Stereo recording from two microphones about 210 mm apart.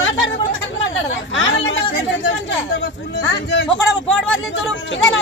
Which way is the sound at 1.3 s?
65° left (ahead or behind).